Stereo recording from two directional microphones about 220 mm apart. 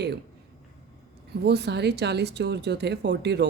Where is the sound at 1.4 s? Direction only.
50° right (ahead or behind).